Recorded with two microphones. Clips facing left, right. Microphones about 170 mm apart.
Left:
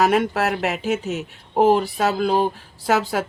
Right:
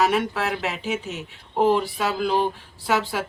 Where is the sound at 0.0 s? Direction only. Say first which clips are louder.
Left 3 dB; 45° left (ahead or behind).